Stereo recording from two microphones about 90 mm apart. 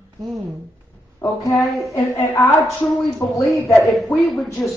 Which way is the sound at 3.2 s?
40° left (ahead or behind).